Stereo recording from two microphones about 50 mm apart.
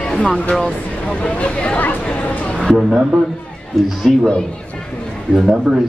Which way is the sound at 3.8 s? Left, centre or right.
Centre.